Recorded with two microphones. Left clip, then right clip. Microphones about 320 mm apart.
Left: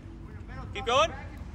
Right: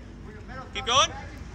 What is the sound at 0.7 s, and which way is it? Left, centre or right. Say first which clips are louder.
Speech: right 2 dB; left.